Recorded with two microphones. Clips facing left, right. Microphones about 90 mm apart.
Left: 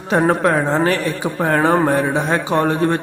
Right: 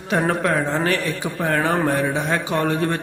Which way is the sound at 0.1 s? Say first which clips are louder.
Left 5 dB; 30° left (ahead or behind).